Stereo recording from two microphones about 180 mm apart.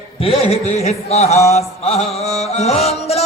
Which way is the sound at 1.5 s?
35° left (ahead or behind).